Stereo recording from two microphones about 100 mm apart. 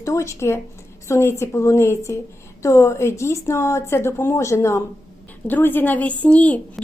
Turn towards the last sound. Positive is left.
turn(degrees=15)  # may be behind; listen again after turning